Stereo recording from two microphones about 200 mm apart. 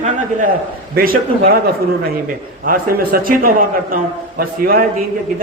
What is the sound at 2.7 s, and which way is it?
A man's voice, 45° right (ahead or behind).